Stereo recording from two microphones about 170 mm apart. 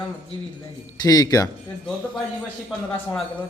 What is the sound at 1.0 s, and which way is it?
Speech, 20° left (ahead or behind).